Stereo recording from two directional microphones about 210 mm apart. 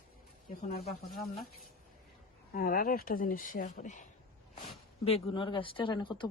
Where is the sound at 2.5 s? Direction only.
45° left (ahead or behind).